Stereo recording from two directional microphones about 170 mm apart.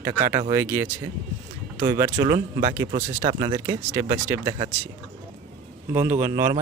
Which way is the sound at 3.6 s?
15° right (ahead or behind).